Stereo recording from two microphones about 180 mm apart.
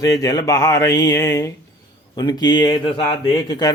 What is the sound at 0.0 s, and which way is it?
Speech, 20° left (ahead or behind).